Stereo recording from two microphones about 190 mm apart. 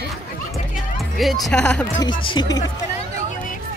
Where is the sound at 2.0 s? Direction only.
25° left (ahead or behind).